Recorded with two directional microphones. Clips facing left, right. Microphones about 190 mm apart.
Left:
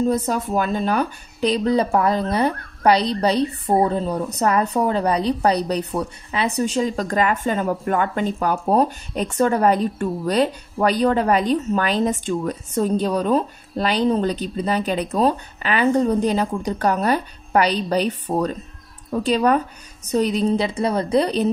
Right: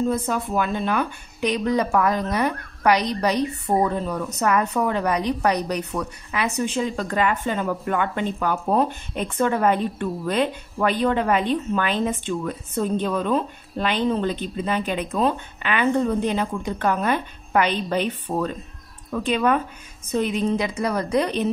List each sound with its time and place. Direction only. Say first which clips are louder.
0.1 s speech: left 3 dB; 40° left (ahead or behind)